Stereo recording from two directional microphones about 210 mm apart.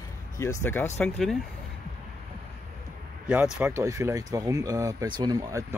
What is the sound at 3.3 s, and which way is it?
Speech, 10° right (ahead or behind).